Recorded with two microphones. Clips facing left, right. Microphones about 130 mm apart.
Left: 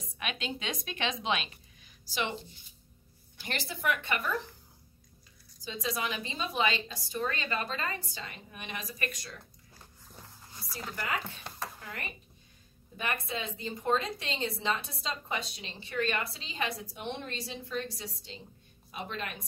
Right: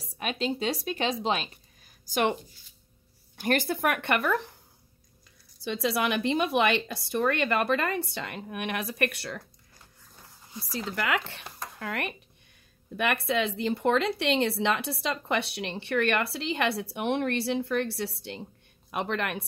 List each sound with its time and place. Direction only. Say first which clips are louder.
0.0 s speech: right 7 dB; 35° right (ahead or behind)
3.3 s a woman's voice: right 12 dB; 55° right (ahead or behind)
5.6 s a woman's voice: right 7 dB; 75° right (ahead or behind)
11.0 s a woman's voice: right 6 dB; 85° right